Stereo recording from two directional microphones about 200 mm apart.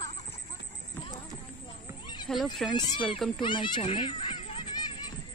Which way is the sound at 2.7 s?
20° left (ahead or behind).